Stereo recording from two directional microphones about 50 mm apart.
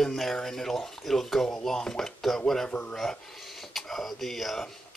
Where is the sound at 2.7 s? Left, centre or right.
Left.